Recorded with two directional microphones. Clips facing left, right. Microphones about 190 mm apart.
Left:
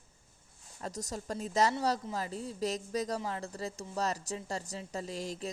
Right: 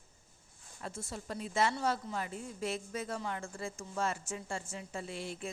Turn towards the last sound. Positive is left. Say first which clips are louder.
# left 3 dB
turn(degrees=40)  # may be behind; listen again after turning